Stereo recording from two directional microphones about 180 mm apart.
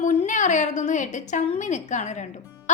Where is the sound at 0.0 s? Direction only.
40° left (ahead or behind).